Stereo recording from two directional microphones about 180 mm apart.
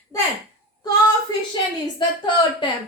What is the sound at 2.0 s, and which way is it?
Speech, 25° left (ahead or behind).